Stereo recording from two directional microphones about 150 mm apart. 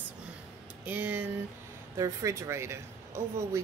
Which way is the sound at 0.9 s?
10° right (ahead or behind).